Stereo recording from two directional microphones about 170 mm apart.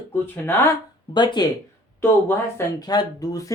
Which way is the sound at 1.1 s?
25° left (ahead or behind).